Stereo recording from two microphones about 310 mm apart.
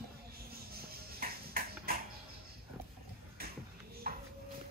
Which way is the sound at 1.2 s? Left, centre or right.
Right.